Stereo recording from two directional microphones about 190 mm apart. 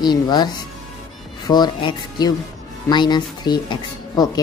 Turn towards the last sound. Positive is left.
turn(degrees=20)  # may be behind; listen again after turning